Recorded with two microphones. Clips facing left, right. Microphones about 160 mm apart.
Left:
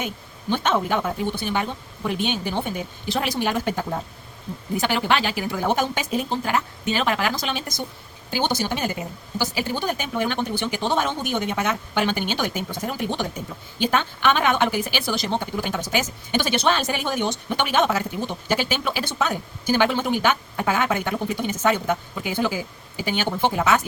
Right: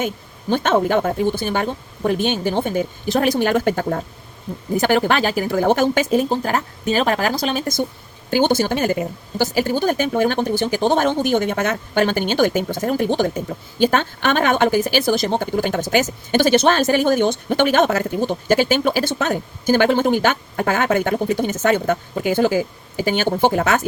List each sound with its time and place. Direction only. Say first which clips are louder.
0.7 s a woman's voice: right 7 dB; 55° right (ahead or behind)
4.8 s a woman's voice: right 5 dB; 45° right (ahead or behind)
8.3 s a woman's voice: right 7 dB; 50° right (ahead or behind)